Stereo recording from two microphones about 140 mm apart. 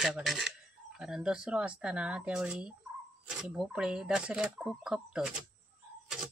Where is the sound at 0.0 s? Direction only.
Centre (ahead or behind).